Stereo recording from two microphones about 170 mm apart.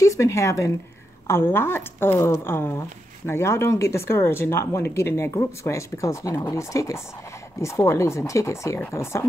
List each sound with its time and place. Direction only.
0.0 s speech: 20° left (ahead or behind)